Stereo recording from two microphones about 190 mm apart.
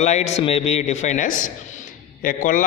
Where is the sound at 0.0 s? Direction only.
35° left (ahead or behind).